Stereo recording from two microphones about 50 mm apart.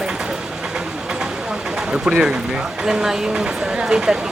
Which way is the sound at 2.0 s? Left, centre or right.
Centre.